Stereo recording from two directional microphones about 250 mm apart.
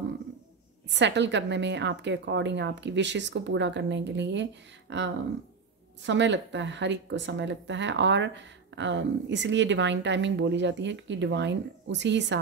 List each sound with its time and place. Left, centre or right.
0.8 s speech: right